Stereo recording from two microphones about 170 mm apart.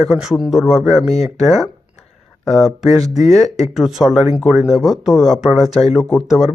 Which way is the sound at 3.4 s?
40° left (ahead or behind).